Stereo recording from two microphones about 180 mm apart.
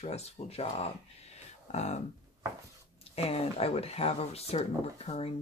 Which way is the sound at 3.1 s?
35° left (ahead or behind).